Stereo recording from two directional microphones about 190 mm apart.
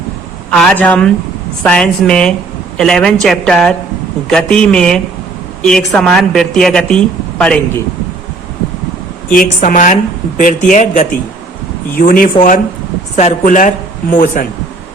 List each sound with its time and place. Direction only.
0.6 s a woman's voice: 5° left (ahead or behind)
9.3 s speech: 45° left (ahead or behind)